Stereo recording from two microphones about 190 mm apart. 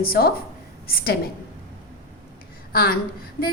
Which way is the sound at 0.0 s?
55° left (ahead or behind).